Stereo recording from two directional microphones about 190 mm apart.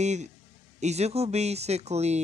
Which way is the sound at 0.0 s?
35° right (ahead or behind).